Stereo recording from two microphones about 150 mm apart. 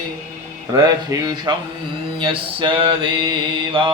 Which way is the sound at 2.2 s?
35° right (ahead or behind).